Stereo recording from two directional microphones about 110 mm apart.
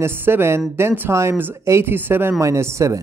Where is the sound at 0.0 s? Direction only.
20° right (ahead or behind).